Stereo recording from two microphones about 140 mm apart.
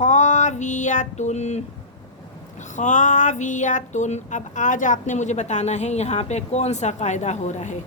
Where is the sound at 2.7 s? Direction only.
60° left (ahead or behind).